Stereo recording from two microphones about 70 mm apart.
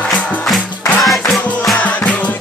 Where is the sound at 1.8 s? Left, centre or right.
Left.